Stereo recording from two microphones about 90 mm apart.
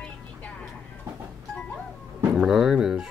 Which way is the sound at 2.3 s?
5° right (ahead or behind).